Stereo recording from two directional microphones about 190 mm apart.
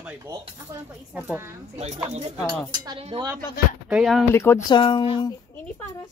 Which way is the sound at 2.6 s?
20° right (ahead or behind).